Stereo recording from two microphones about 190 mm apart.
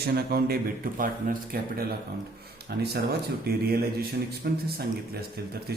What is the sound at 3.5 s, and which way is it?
Mantra, 55° right (ahead or behind).